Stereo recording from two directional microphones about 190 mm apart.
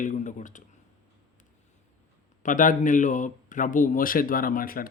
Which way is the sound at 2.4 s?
45° left (ahead or behind).